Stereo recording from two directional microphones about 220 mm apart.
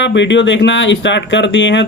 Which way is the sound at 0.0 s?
55° left (ahead or behind).